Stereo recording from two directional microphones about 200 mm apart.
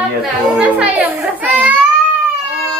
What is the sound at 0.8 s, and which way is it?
Speech, 10° right (ahead or behind).